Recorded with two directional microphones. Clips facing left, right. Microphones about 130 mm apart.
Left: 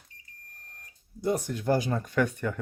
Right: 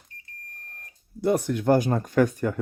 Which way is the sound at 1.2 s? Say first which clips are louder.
Right 5 dB; 65° right (ahead or behind).